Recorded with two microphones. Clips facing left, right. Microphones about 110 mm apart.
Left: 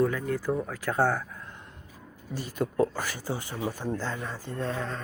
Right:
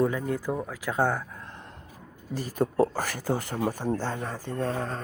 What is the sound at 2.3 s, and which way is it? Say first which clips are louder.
Speech: right 3 dB; 40° right (ahead or behind).